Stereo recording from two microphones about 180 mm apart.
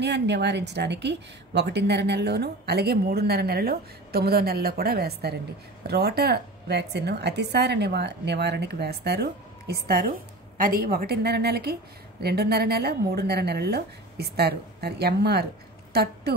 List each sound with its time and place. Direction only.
0.0 s a woman's voice: 70° right (ahead or behind)